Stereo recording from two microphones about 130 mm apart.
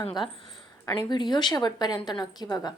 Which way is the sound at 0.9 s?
35° left (ahead or behind).